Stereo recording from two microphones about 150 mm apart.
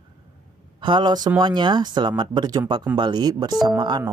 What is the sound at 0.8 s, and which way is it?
Speech, 30° right (ahead or behind).